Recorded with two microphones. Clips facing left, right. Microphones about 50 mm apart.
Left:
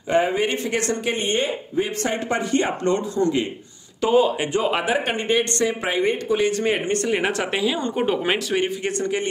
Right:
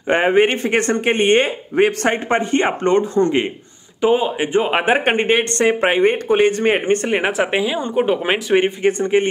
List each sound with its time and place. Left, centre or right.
0.1 s speech: right
2.2 s speech: right
4.0 s speech: right
4.6 s speech: right
7.2 s speech: centre